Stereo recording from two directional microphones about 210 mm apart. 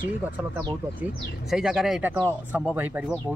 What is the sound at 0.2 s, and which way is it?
Speech, 10° right (ahead or behind).